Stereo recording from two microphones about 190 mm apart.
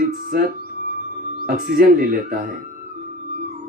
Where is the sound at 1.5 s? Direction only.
50° right (ahead or behind).